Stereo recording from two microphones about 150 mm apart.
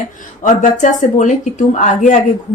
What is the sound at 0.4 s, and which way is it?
Speech, 55° left (ahead or behind).